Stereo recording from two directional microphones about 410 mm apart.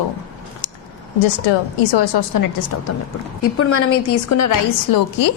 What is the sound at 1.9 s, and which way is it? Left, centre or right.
A woman's voice, left.